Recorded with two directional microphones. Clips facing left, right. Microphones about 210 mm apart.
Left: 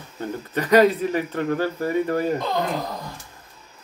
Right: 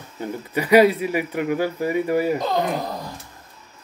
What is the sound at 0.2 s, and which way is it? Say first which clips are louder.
A man's voice: right 1 dB; 10° right (ahead or behind).